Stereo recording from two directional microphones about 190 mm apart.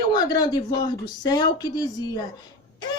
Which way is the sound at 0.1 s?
20° left (ahead or behind).